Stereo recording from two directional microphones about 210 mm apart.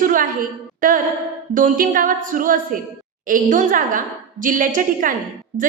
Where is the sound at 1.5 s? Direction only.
40° right (ahead or behind).